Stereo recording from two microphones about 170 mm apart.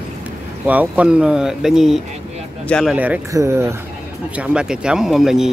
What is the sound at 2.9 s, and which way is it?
Speech, 10° right (ahead or behind).